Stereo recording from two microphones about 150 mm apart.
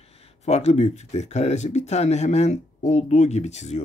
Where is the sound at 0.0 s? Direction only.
45° left (ahead or behind).